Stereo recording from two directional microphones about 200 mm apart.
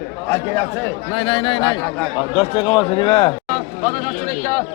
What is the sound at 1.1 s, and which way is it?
A man's voice, 25° left (ahead or behind).